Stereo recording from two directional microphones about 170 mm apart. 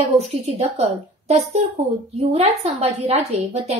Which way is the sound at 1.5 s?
40° right (ahead or behind).